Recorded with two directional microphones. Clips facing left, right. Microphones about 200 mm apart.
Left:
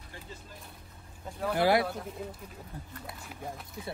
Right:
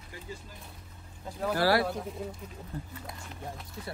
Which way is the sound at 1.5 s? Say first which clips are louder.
Left 1 dB; 20° left (ahead or behind).